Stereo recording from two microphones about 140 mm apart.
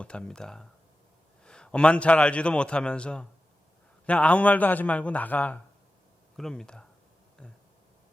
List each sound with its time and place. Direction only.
0.0 s a man's voice: 5° left (ahead or behind)